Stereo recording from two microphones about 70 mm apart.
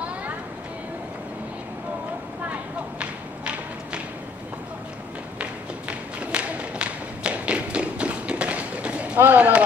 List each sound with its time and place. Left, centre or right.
2.4 s thump: centre
5.4 s a sound: centre
9.2 s speech: right